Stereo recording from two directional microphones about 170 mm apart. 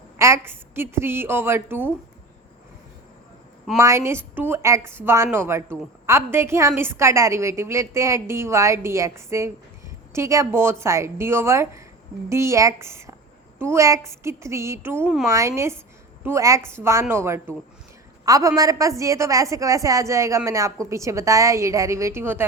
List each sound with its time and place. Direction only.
0.2 s a woman's voice: 15° right (ahead or behind)
3.8 s a woman's voice: 15° right (ahead or behind)
15.0 s speech: centre (ahead or behind)
15.3 s a woman's voice: 15° right (ahead or behind)